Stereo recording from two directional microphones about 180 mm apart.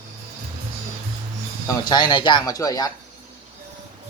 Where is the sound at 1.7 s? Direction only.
25° left (ahead or behind).